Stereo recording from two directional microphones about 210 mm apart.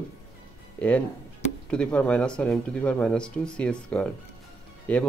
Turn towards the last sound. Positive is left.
turn(degrees=5)  # may be behind; listen again after turning